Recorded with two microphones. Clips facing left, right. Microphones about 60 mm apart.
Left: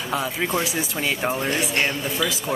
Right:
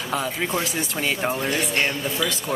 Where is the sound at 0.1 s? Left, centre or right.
Centre.